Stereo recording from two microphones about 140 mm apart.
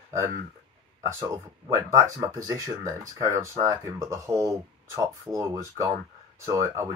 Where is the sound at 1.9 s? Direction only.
25° right (ahead or behind).